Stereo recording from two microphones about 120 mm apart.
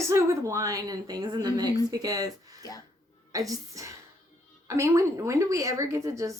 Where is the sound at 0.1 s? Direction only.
25° right (ahead or behind).